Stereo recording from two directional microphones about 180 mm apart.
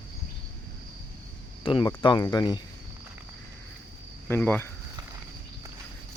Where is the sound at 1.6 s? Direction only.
25° left (ahead or behind).